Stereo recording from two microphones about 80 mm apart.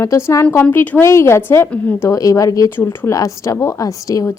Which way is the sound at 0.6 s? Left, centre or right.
Left.